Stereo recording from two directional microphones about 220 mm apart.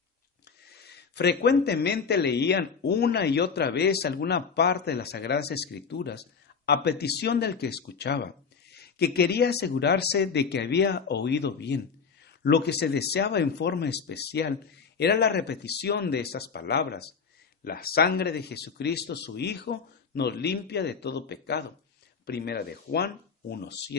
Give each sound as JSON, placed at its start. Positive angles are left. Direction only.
{"t": 0.7, "sound": "speech", "side_deg": 50}